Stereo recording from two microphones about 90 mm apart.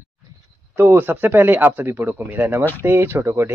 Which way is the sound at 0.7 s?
25° right (ahead or behind).